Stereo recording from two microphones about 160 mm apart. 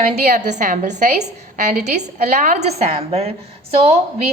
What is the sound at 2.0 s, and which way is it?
A woman's voice, 50° right (ahead or behind).